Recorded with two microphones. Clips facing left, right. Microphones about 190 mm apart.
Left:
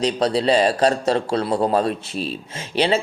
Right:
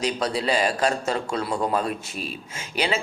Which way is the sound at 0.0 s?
30° left (ahead or behind).